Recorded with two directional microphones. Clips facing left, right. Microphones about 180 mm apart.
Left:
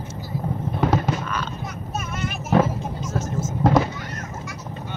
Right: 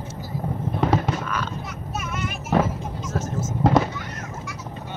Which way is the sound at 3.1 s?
Centre (ahead or behind).